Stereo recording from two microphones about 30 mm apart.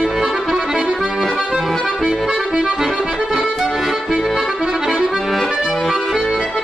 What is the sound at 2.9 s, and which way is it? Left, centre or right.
Accordion, right.